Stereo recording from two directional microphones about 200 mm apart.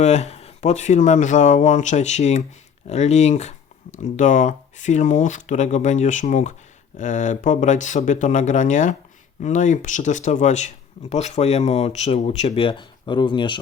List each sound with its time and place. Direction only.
0.0 s speech: 35° left (ahead or behind)